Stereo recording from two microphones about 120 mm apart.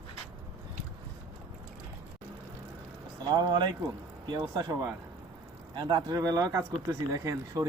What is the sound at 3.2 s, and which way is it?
Speech, 40° right (ahead or behind).